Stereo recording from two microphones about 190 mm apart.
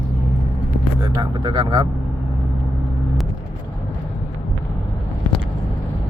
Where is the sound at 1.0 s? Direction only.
20° right (ahead or behind).